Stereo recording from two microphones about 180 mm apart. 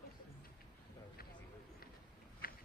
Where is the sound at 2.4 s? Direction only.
55° left (ahead or behind).